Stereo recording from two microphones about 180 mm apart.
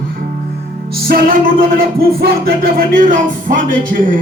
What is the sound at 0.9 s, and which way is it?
Music, 55° right (ahead or behind).